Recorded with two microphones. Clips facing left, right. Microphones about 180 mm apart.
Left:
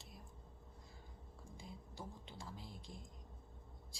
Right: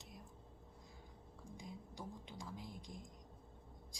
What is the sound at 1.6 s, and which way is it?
Music, 15° right (ahead or behind).